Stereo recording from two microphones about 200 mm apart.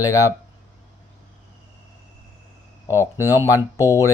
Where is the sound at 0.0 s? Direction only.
15° left (ahead or behind).